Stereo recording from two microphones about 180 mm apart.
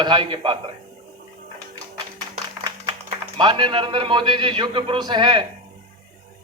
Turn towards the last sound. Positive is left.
turn(degrees=-25)  # may be behind; listen again after turning